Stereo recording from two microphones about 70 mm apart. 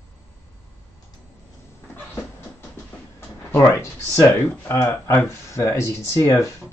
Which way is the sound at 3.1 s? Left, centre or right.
Left.